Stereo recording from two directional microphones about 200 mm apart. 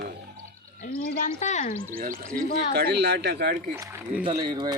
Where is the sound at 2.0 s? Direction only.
45° right (ahead or behind).